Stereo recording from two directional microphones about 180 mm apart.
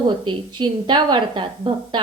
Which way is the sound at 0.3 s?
25° right (ahead or behind).